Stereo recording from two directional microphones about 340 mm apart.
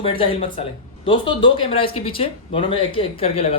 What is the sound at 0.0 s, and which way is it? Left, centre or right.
Speech, centre.